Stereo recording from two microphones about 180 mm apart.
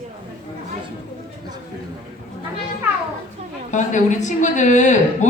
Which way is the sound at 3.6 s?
40° left (ahead or behind).